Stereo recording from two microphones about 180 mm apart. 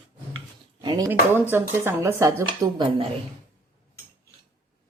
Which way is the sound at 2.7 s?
30° right (ahead or behind).